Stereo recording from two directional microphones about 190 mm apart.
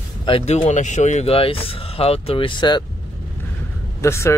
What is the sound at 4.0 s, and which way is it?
Speech, 15° left (ahead or behind).